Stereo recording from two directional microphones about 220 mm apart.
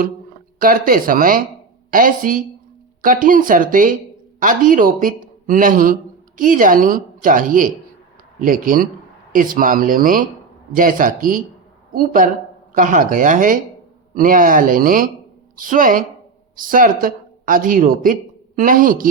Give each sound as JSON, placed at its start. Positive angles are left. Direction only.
{"t": 0.6, "sound": "a man's voice", "side_deg": -40}